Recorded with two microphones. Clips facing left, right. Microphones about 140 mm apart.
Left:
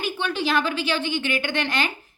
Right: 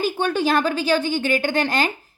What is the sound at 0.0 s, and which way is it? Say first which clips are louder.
A woman's voice: right 5 dB; 45° right (ahead or behind).